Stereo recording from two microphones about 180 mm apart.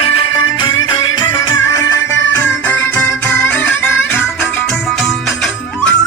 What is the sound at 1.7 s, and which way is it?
Music, 20° left (ahead or behind).